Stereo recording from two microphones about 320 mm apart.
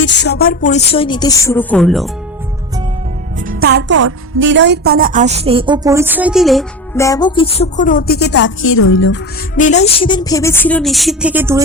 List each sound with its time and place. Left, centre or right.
0.0 s speech: left; by 2.0 s centre
3.4 s a woman's voice: right; by 9.1 s left
9.6 s speech: left; by 11.6 s centre